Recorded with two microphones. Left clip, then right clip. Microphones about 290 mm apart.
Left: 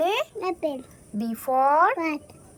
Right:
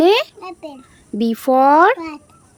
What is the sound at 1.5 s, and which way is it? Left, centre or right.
Speech, right.